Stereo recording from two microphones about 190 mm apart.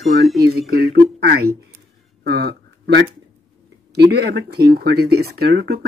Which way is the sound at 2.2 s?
60° right (ahead or behind).